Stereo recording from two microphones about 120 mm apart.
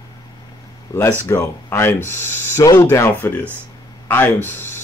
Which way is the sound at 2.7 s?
30° left (ahead or behind).